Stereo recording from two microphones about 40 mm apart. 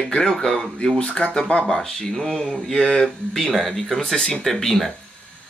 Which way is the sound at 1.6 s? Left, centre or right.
Centre.